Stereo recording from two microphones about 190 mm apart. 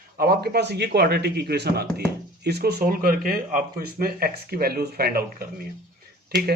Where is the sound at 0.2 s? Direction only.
55° right (ahead or behind).